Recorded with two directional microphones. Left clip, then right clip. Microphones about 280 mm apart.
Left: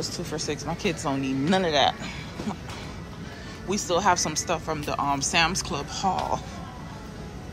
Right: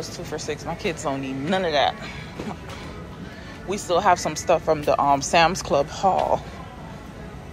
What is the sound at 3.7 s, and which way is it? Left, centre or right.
Speech, centre.